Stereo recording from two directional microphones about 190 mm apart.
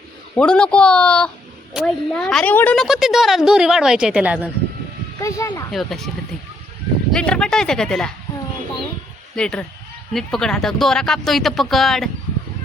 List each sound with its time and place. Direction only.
0.3 s a woman's voice: 5° left (ahead or behind)
5.2 s speech: 15° left (ahead or behind)
5.7 s a woman's voice: centre (ahead or behind)
7.1 s speech: 5° left (ahead or behind)
9.3 s a woman's voice: 5° left (ahead or behind)